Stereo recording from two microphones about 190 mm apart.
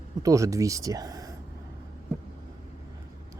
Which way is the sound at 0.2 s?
15° right (ahead or behind).